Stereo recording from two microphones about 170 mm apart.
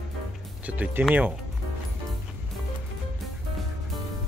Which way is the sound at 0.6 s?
10° right (ahead or behind).